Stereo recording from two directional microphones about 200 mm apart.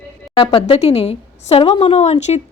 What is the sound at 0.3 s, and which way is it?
A woman's voice, 30° left (ahead or behind).